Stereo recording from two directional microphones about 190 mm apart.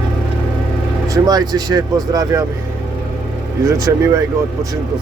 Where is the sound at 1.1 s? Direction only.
20° right (ahead or behind).